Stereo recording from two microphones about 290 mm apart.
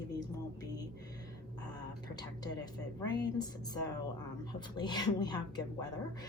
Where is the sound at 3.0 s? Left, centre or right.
Centre.